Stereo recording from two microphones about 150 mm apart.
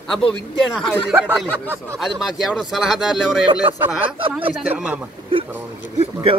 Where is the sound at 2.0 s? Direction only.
Centre (ahead or behind).